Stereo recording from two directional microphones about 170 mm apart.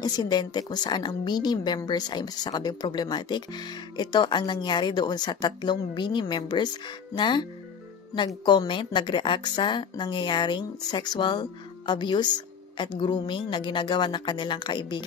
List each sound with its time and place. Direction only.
0.0 s a woman's voice: 25° left (ahead or behind)
8.5 s a woman's voice: 25° left (ahead or behind)